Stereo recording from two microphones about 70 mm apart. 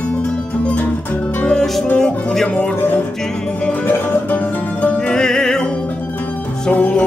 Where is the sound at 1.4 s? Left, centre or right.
Centre.